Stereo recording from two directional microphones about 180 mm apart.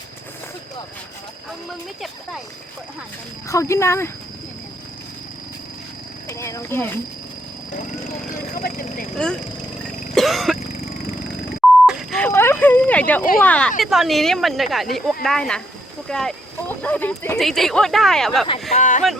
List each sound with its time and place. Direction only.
3.5 s speech: 15° left (ahead or behind)
6.2 s speech: 15° left (ahead or behind)
8.3 s speech: 50° left (ahead or behind)
9.1 s speech: 5° left (ahead or behind)
9.8 s throat clearing: centre (ahead or behind)
11.6 s beep: centre (ahead or behind)
12.2 s a sound: 15° left (ahead or behind)
13.4 s speech: 5° left (ahead or behind)
18.7 s speech: 40° left (ahead or behind)